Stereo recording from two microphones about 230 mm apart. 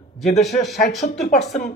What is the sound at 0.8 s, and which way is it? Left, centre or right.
Speech, left.